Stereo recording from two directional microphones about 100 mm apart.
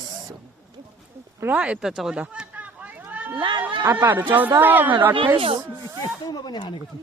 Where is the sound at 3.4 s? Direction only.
55° right (ahead or behind).